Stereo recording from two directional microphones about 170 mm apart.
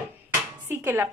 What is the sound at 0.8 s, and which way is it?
Speech, 15° right (ahead or behind).